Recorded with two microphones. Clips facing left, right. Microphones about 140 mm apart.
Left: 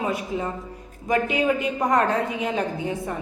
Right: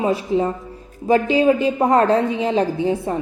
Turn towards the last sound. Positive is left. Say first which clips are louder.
# right 7 dB
turn(degrees=-30)  # may be behind; listen again after turning